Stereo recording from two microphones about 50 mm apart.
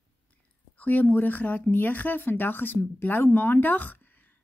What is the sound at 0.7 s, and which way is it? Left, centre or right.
Speech, left.